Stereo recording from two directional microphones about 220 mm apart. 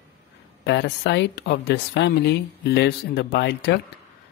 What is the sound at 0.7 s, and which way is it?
A woman's voice, 50° left (ahead or behind).